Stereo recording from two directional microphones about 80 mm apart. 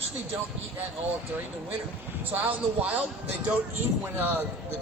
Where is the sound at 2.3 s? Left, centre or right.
Right.